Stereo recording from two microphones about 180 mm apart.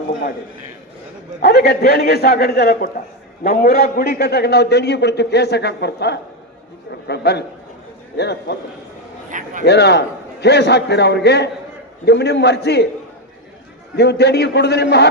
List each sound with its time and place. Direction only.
0.1 s a sound: 65° left (ahead or behind)
1.4 s a man's voice: 60° left (ahead or behind)
9.3 s speech: 45° right (ahead or behind)
9.6 s a man's voice: 65° left (ahead or behind)
13.9 s a man's voice: 65° left (ahead or behind)